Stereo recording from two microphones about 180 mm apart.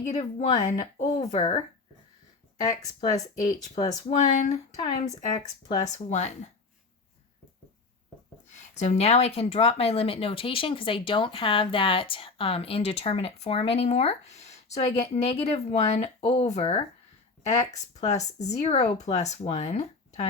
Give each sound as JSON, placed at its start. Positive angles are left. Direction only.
{"t": 0.0, "sound": "speech", "side_deg": 40}
{"t": 3.8, "sound": "speech", "side_deg": 40}
{"t": 8.5, "sound": "speech", "side_deg": 40}